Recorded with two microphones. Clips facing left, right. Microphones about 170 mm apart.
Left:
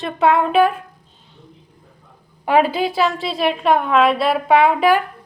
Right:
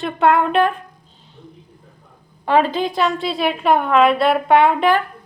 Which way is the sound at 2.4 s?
10° left (ahead or behind).